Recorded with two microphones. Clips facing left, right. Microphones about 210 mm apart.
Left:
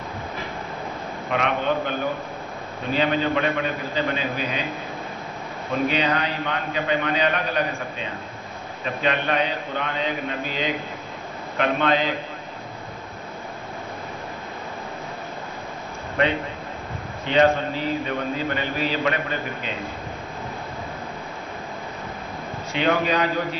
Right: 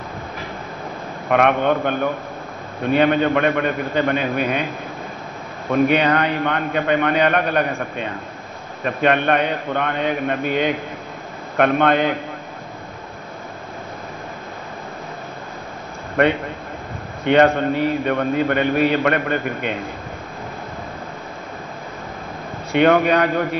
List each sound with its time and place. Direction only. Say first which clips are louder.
1.3 s a man's voice: right 7 dB; 55° right (ahead or behind)
5.9 s a man's voice: right 6 dB; 60° right (ahead or behind)
16.2 s a man's voice: right 5 dB; 55° right (ahead or behind)
22.7 s a man's voice: right 7 dB; 60° right (ahead or behind)